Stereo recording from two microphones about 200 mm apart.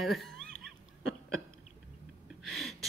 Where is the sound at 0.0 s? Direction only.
Centre (ahead or behind).